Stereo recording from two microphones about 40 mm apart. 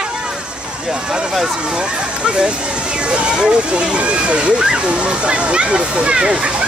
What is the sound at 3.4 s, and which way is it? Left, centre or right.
Speech, right.